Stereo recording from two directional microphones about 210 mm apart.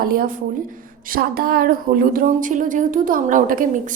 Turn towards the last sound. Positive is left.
turn(degrees=-40)  # may be behind; listen again after turning